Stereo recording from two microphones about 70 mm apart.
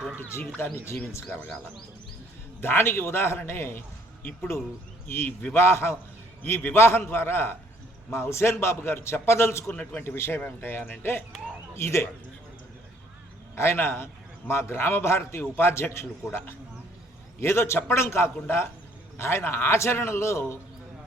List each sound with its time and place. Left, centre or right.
1.1 s a man's voice: left
2.6 s a man's voice: left
13.6 s a man's voice: left